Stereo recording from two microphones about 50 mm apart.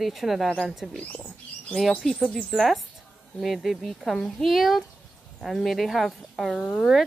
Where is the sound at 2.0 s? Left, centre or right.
Centre.